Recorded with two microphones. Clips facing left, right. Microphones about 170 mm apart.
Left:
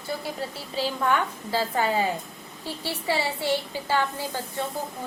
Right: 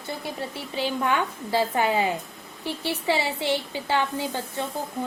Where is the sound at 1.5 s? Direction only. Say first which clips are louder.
Right 2 dB; 20° right (ahead or behind).